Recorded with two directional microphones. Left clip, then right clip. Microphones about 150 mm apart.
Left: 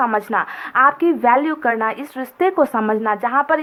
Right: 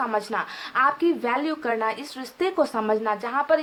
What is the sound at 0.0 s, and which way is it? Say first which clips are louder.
Speech: left 7 dB; 25° left (ahead or behind).